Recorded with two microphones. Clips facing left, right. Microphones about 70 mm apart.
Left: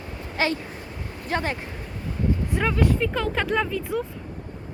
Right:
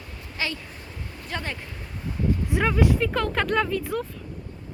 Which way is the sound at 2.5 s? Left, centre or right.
Centre.